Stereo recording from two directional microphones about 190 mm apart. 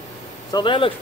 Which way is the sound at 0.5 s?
25° left (ahead or behind).